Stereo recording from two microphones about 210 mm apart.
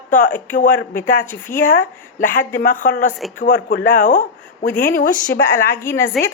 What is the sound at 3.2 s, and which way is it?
Speech, centre (ahead or behind).